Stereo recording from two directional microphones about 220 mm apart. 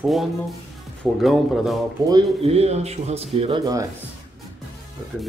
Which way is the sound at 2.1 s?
25° right (ahead or behind).